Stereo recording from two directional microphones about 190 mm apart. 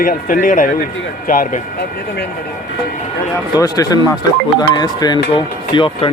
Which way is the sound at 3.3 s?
20° left (ahead or behind).